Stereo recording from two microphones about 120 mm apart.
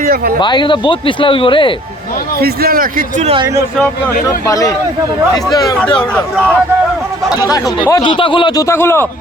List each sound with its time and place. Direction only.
0.3 s speech: 40° left (ahead or behind)
3.8 s a man's voice: 15° left (ahead or behind)
4.4 s a man's voice: 30° left (ahead or behind)
5.8 s a man's voice: 10° left (ahead or behind)
7.3 s speech: 35° left (ahead or behind)
8.0 s speech: 45° left (ahead or behind)
8.6 s a man's voice: 20° left (ahead or behind)